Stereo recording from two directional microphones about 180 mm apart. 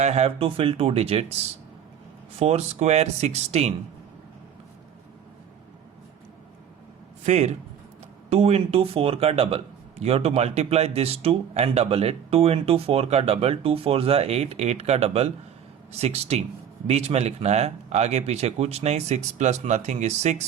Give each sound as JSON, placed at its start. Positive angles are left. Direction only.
{"t": 0.0, "sound": "speech", "side_deg": -35}
{"t": 2.4, "sound": "speech", "side_deg": -35}
{"t": 7.3, "sound": "speech", "side_deg": -40}